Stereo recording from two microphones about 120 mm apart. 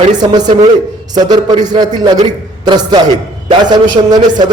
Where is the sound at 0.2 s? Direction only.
35° right (ahead or behind).